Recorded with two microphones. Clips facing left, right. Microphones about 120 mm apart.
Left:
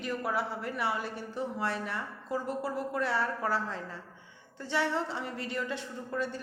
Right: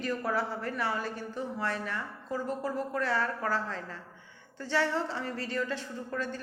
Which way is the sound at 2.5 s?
10° left (ahead or behind).